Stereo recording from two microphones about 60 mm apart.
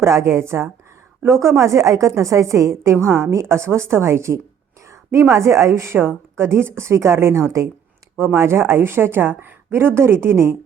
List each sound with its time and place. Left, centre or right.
0.0 s a woman's voice: right